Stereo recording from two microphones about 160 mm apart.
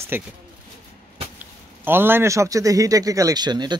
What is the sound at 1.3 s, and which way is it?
A man's voice, 15° right (ahead or behind).